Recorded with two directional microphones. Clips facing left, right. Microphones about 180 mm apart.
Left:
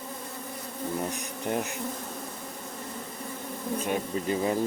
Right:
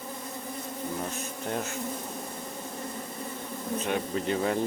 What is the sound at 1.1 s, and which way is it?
Bee, 15° left (ahead or behind).